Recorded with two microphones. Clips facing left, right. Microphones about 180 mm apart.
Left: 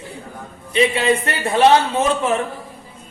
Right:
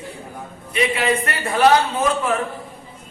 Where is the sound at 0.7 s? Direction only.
25° left (ahead or behind).